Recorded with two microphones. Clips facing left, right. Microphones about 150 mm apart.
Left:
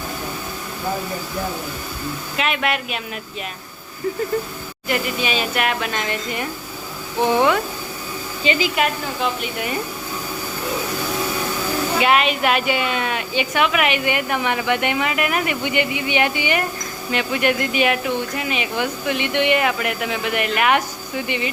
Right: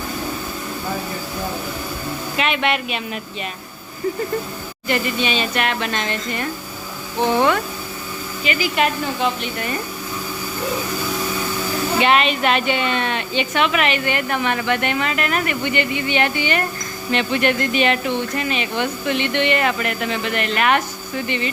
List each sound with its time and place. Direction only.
2.3 s speech: centre (ahead or behind)
4.9 s a woman's voice: 5° left (ahead or behind); by 8.7 s 20° left (ahead or behind)
8.7 s speech: 5° left (ahead or behind)
11.9 s a woman's voice: 5° left (ahead or behind)